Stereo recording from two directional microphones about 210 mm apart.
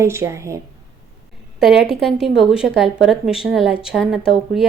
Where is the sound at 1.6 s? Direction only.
Centre (ahead or behind).